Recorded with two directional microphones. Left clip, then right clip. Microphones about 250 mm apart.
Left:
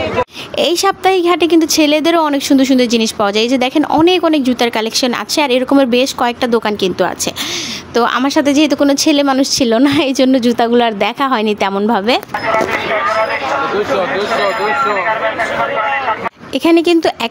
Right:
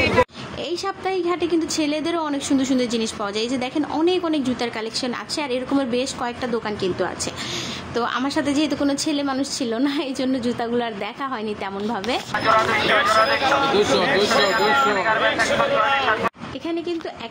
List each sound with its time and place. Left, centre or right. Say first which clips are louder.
0.6 s a woman's voice: left 14 dB; left
16.6 s speech: left 16 dB; left